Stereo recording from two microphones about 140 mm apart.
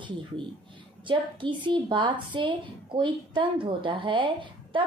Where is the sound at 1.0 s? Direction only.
35° right (ahead or behind).